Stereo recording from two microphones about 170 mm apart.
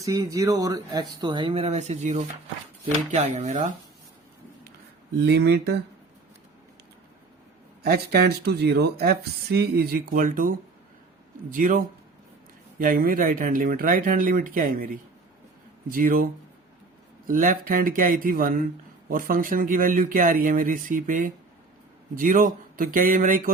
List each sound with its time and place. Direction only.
0.0 s speech: 20° right (ahead or behind); by 3.7 s 45° right (ahead or behind)
5.2 s speech: 75° right (ahead or behind)
7.8 s speech: 65° right (ahead or behind)
11.5 s speech: 50° right (ahead or behind)
12.8 s speech: 55° right (ahead or behind)